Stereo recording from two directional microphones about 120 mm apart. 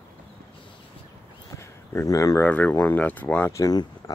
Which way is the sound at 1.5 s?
25° left (ahead or behind).